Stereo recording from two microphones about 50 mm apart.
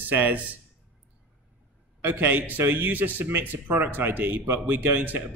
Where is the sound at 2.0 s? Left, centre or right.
Right.